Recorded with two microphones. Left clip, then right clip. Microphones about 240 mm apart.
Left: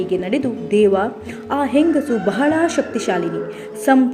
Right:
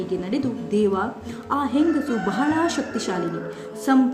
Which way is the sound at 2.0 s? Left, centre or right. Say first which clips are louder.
Left 6 dB; centre.